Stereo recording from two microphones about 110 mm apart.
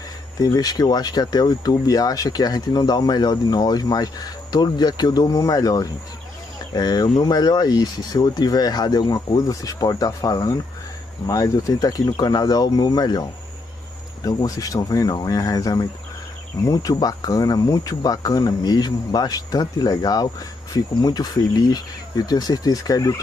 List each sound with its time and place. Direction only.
0.4 s speech: 35° left (ahead or behind)